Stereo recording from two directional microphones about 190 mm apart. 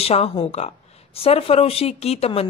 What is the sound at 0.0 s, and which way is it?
A woman's voice, 30° left (ahead or behind).